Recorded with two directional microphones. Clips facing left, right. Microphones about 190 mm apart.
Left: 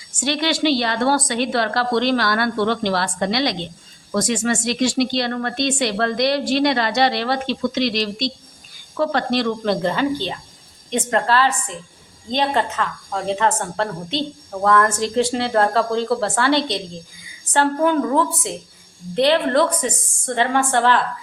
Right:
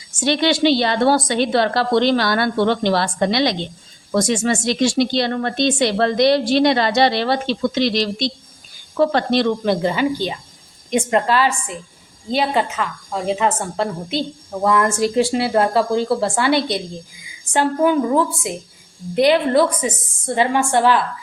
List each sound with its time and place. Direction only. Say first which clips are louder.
0.2 s speech: right 4 dB; 25° right (ahead or behind)
9.6 s a woman's voice: right 1 dB; 10° right (ahead or behind)